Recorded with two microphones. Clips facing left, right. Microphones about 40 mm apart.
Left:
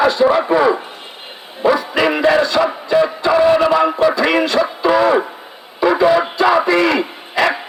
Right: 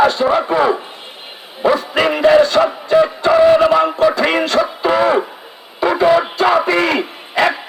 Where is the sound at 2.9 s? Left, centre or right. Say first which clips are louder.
Right 2 dB; right.